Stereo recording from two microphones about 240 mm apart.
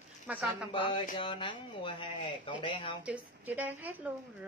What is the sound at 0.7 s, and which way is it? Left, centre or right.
Speech, left.